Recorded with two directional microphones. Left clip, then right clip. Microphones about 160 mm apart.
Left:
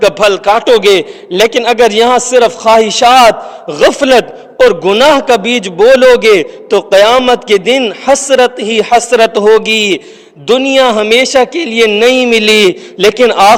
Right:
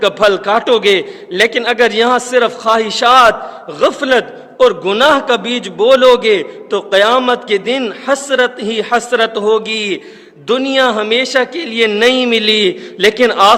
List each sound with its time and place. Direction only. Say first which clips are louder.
0.0 s a man's voice: left 4 dB; 35° left (ahead or behind)